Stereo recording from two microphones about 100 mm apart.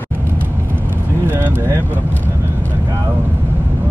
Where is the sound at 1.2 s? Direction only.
20° right (ahead or behind).